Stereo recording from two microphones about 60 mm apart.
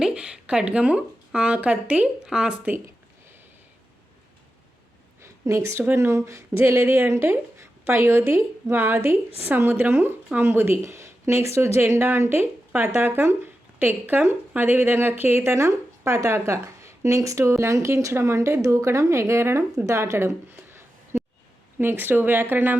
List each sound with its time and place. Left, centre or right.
0.0 s speech: centre
5.2 s a sound: right
6.0 s speech: right
6.6 s a woman's voice: right
6.8 s a woman's voice: right
19.8 s a woman's voice: right